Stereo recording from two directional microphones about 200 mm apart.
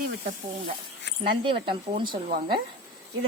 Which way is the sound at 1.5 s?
25° right (ahead or behind).